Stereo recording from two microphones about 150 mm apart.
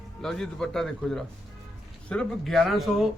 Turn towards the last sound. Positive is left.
turn(degrees=0)  # may be behind; listen again after turning